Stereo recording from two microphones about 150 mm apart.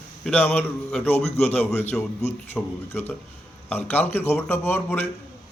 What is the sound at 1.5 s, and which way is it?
Speech, 10° left (ahead or behind).